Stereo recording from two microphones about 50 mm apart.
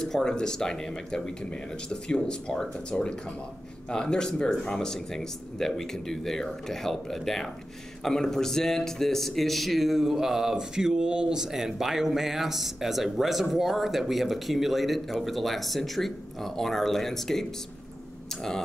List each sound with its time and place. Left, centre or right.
0.0 s a man's voice: centre